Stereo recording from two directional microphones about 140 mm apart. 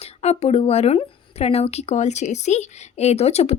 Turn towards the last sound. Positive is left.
turn(degrees=50)  # may be behind; listen again after turning